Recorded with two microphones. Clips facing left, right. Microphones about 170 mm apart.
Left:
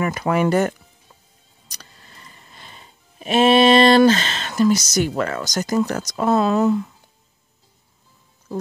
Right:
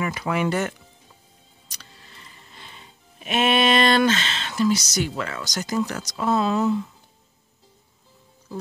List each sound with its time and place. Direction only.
0.0 s speech: 45° left (ahead or behind)
1.7 s music: 40° left (ahead or behind)